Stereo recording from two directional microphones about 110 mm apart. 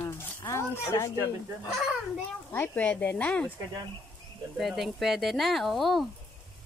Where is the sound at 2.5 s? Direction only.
20° left (ahead or behind).